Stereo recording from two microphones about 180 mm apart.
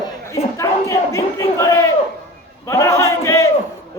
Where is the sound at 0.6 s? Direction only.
15° left (ahead or behind).